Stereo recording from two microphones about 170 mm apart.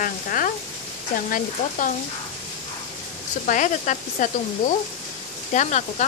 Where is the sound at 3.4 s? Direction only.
50° left (ahead or behind).